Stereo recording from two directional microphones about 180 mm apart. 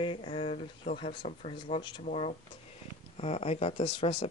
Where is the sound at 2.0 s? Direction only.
35° left (ahead or behind).